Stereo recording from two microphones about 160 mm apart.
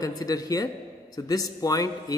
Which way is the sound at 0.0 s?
25° left (ahead or behind).